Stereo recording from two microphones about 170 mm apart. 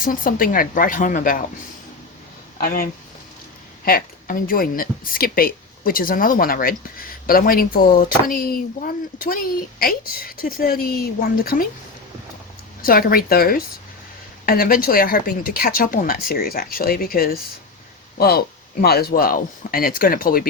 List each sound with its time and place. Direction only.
0.0 s speech: 55° left (ahead or behind)
2.6 s speech: 60° left (ahead or behind)
12.8 s speech: 60° left (ahead or behind)